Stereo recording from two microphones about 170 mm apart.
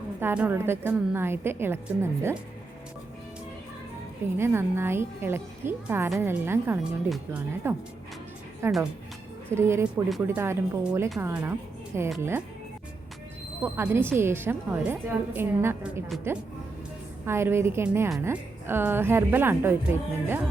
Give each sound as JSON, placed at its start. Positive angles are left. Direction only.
{"t": 0.2, "sound": "a woman's voice", "side_deg": -10}
{"t": 4.4, "sound": "a woman's voice", "side_deg": -15}
{"t": 13.7, "sound": "a woman's voice", "side_deg": -15}